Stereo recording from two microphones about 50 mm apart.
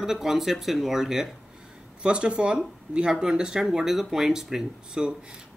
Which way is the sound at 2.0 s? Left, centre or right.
Right.